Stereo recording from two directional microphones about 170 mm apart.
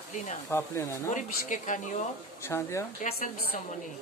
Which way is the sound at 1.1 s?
50° left (ahead or behind).